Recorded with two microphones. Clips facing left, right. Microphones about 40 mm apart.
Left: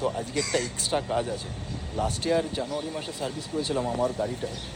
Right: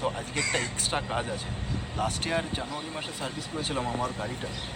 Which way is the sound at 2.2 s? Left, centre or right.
Right.